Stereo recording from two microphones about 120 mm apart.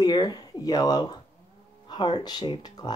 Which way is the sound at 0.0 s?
35° left (ahead or behind).